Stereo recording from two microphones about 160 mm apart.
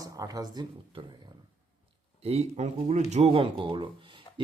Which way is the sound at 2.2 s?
40° right (ahead or behind).